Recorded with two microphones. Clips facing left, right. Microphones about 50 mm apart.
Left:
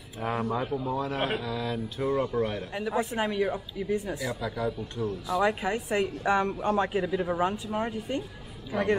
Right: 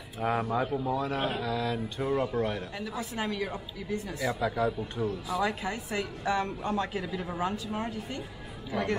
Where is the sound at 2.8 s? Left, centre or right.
Left.